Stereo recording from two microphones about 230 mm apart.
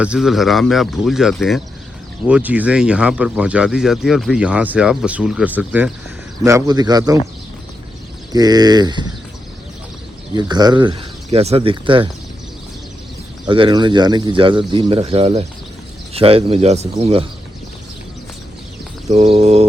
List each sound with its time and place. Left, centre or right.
0.0 s speech: centre
8.3 s speech: centre
10.3 s speech: centre
13.5 s speech: right
19.1 s speech: right